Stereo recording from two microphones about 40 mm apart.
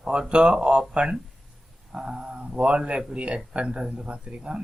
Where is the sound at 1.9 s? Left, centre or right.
Right.